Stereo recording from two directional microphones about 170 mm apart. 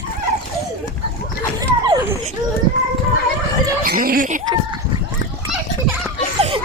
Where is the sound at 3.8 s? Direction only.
60° right (ahead or behind).